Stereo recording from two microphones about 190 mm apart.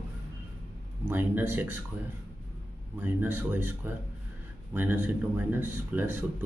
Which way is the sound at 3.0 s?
10° right (ahead or behind).